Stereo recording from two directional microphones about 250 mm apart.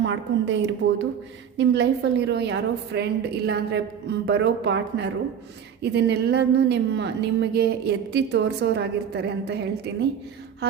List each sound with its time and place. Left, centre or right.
0.0 s a woman's voice: right